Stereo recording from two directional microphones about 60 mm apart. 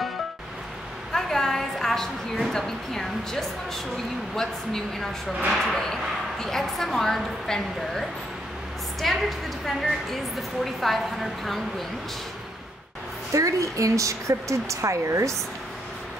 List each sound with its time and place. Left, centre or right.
1.1 s a sound: centre
2.5 s a woman's voice: centre
9.0 s a woman's voice: centre
10.6 s a woman's voice: centre
13.3 s speech: right